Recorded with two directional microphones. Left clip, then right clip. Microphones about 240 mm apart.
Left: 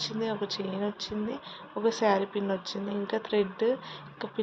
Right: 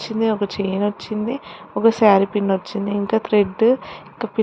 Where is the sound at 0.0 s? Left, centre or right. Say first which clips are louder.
Right 11 dB; right.